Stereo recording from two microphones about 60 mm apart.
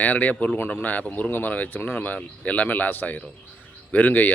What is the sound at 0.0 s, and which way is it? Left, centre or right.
Speech, left.